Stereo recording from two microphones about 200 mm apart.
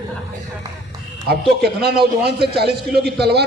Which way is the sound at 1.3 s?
55° right (ahead or behind).